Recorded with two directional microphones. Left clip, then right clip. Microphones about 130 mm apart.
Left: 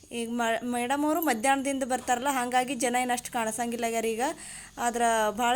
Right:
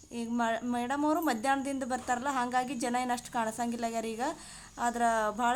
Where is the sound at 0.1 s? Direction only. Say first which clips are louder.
Left 3 dB; 15° left (ahead or behind).